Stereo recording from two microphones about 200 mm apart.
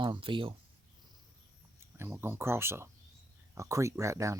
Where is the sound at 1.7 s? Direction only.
10° right (ahead or behind).